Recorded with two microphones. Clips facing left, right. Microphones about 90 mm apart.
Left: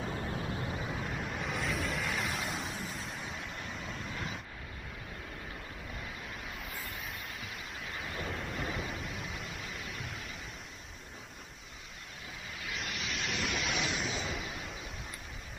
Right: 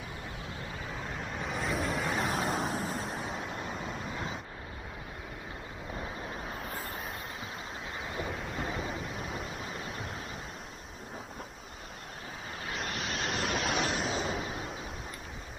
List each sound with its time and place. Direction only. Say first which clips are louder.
0.9 s vehicle: left 1 dB; centre (ahead or behind)
1.8 s vehicle: right 4 dB; 35° right (ahead or behind)
6.5 s vehicle: right 5 dB; 35° right (ahead or behind)
7.9 s thunder: right 2 dB; 20° right (ahead or behind)
9.1 s waves: right 4 dB; 40° right (ahead or behind)
9.5 s a sound: right 4 dB; 40° right (ahead or behind)
12.6 s waves: right 3 dB; 40° right (ahead or behind)
14.1 s a sound: right 5 dB; 40° right (ahead or behind)